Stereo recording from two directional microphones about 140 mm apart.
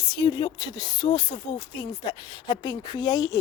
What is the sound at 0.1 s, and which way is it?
Speech, 30° left (ahead or behind).